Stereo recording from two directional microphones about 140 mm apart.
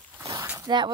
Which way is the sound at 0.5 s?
30° right (ahead or behind).